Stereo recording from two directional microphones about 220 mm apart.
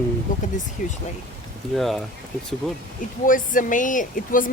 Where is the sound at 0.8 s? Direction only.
35° left (ahead or behind).